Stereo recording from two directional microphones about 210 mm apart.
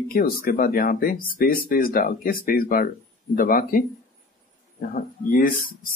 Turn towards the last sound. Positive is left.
turn(degrees=40)  # may be behind; listen again after turning